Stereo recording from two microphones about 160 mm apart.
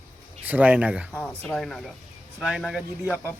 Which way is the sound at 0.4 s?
10° right (ahead or behind).